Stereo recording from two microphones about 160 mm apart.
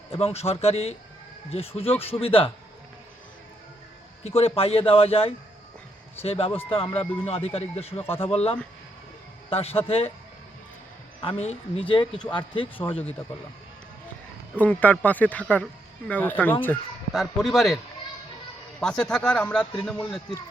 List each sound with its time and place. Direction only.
0.1 s a man's voice: 40° left (ahead or behind)
4.2 s a man's voice: 40° left (ahead or behind)
11.2 s a man's voice: 35° left (ahead or behind)
13.0 s speech: 10° left (ahead or behind)
14.5 s speech: 10° left (ahead or behind)
17.2 s speech: centre (ahead or behind)
18.8 s speech: 5° left (ahead or behind)